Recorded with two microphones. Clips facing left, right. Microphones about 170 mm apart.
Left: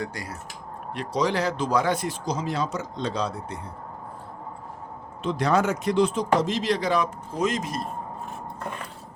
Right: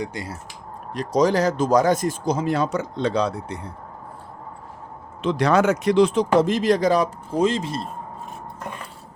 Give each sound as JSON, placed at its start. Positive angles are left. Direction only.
{"t": 0.0, "sound": "speech", "side_deg": -25}
{"t": 0.9, "sound": "speech", "side_deg": -40}
{"t": 5.2, "sound": "speech", "side_deg": -85}